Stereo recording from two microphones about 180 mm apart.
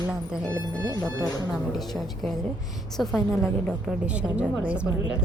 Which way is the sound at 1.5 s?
Centre (ahead or behind).